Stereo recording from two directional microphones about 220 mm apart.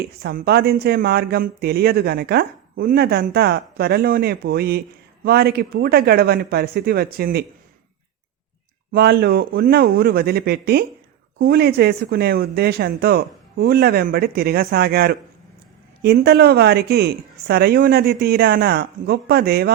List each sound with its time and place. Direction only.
0.0 s speech: 45° right (ahead or behind)
8.9 s speech: 45° right (ahead or behind)